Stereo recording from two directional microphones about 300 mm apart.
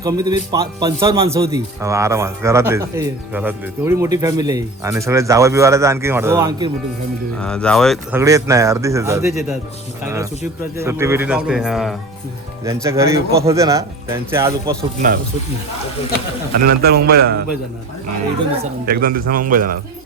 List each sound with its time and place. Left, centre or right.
0.0 s a man's voice: centre
7.3 s speech: centre
8.2 s a man's voice: centre
14.8 s speech: right
16.6 s a man's voice: right
18.5 s speech: right